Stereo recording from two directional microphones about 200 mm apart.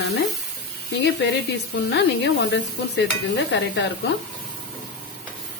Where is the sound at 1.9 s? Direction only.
60° left (ahead or behind).